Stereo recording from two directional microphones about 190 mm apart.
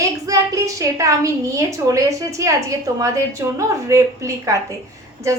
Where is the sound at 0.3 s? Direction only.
20° right (ahead or behind).